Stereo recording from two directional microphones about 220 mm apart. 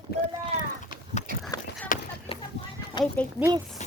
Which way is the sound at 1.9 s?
40° left (ahead or behind).